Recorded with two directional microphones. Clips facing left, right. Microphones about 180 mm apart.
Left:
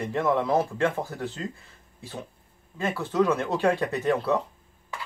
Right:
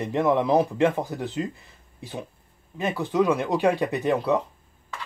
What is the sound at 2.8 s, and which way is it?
Speech, 15° right (ahead or behind).